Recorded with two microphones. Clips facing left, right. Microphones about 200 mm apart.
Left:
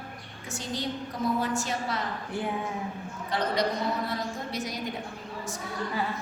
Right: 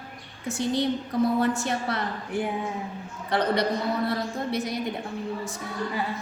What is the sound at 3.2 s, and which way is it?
A man's voice, 60° right (ahead or behind).